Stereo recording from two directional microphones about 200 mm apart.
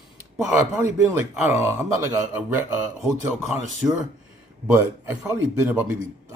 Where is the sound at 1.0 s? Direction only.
10° right (ahead or behind).